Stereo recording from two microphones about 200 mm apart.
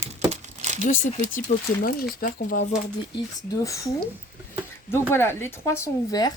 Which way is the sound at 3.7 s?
15° left (ahead or behind).